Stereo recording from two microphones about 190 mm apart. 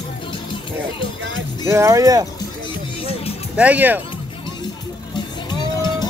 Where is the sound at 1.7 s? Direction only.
15° right (ahead or behind).